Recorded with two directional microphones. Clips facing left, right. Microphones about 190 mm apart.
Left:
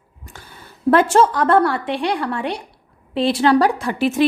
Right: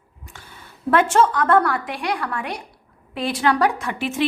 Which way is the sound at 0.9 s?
35° left (ahead or behind).